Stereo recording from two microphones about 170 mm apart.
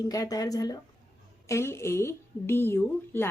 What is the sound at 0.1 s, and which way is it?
A woman's voice, 20° left (ahead or behind).